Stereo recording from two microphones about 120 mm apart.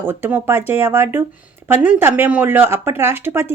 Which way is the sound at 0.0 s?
20° right (ahead or behind).